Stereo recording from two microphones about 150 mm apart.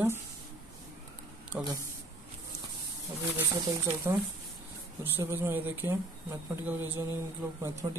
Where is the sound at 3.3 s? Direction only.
15° right (ahead or behind).